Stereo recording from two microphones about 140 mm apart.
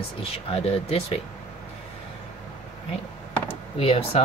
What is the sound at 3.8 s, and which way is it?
Speech, 45° left (ahead or behind).